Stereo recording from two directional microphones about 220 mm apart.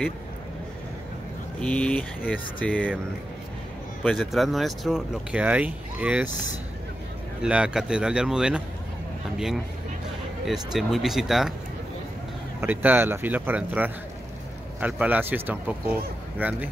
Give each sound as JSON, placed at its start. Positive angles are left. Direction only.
{"t": 1.6, "sound": "speech", "side_deg": 5}
{"t": 4.0, "sound": "speech", "side_deg": 0}
{"t": 7.4, "sound": "speech", "side_deg": -5}
{"t": 10.4, "sound": "speech", "side_deg": 0}
{"t": 12.5, "sound": "speech", "side_deg": -10}